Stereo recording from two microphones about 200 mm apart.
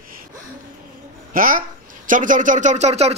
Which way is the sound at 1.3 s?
45° right (ahead or behind).